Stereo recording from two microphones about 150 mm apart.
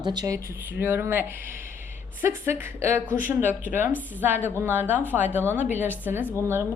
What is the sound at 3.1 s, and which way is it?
Speech, 65° left (ahead or behind).